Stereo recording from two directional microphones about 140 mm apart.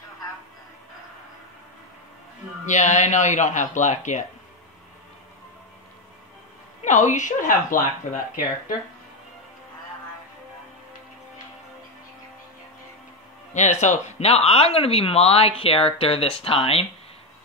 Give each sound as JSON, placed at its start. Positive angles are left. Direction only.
{"t": 2.6, "sound": "speech", "side_deg": 60}
{"t": 6.8, "sound": "speech", "side_deg": 60}
{"t": 13.5, "sound": "speech", "side_deg": 55}